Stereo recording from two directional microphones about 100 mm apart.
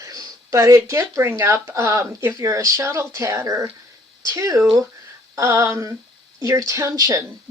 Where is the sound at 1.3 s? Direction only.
25° right (ahead or behind).